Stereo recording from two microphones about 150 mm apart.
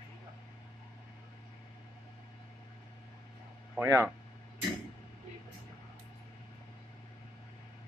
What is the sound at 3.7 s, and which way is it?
Speech, 15° right (ahead or behind).